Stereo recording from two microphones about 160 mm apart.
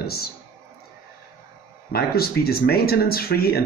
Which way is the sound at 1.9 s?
75° left (ahead or behind).